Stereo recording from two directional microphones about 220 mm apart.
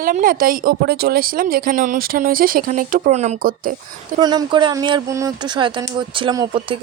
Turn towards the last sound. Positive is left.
turn(degrees=-20)  # may be behind; listen again after turning